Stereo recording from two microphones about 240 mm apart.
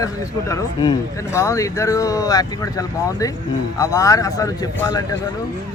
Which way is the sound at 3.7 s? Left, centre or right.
Centre.